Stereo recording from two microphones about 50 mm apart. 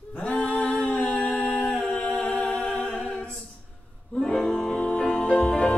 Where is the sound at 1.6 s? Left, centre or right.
Centre.